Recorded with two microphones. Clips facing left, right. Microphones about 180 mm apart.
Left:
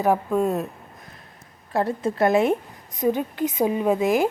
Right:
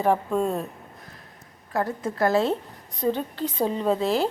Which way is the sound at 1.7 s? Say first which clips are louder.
Left 3 dB; 25° left (ahead or behind).